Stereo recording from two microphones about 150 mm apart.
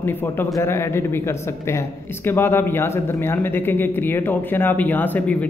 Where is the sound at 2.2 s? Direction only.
15° left (ahead or behind).